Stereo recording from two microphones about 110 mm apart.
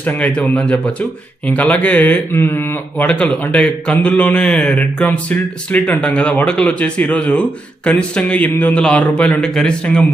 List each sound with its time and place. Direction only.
0.0 s speech: 15° left (ahead or behind)